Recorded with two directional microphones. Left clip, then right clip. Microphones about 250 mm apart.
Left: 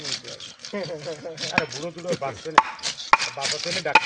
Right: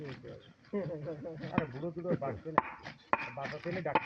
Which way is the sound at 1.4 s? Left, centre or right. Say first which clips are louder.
Left 14 dB; left.